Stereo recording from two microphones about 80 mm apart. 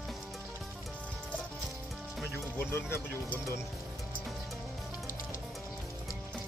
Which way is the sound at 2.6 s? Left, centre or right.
Left.